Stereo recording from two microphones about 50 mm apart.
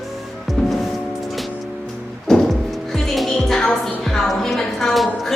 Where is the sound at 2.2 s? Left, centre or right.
Centre.